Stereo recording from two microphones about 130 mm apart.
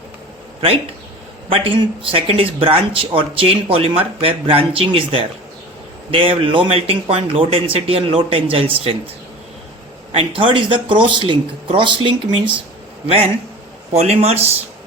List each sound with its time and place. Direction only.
1.5 s speech: 45° right (ahead or behind)
10.1 s speech: 45° right (ahead or behind)